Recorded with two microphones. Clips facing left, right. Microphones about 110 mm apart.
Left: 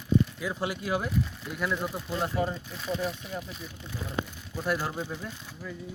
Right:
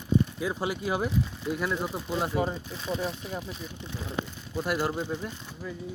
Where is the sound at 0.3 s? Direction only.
20° right (ahead or behind).